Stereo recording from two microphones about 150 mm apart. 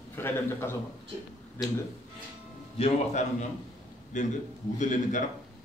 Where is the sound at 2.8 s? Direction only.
45° left (ahead or behind).